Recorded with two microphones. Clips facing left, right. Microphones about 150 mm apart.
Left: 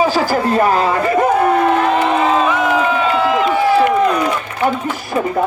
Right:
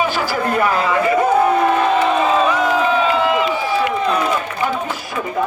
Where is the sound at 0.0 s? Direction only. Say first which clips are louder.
Left 4 dB; 35° left (ahead or behind).